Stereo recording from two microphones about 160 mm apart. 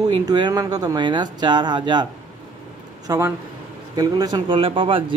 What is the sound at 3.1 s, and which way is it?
Speech, 20° right (ahead or behind).